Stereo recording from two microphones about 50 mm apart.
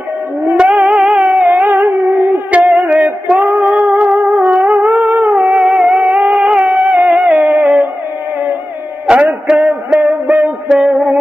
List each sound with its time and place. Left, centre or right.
0.7 s music: right
1.0 s a sound: right
2.9 s female singing: right
3.3 s music: right
3.6 s music: right
9.1 s a sound: centre
9.5 s music: centre
9.9 s music: right